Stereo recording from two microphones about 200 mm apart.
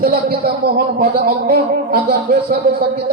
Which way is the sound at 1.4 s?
50° right (ahead or behind).